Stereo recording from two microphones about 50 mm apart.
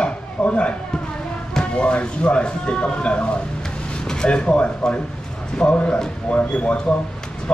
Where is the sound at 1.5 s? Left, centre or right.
Left.